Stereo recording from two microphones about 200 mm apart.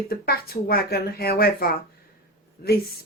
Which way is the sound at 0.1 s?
50° left (ahead or behind).